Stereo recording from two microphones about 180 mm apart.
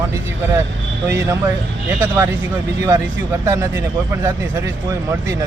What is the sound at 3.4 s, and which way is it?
Speech, 20° right (ahead or behind).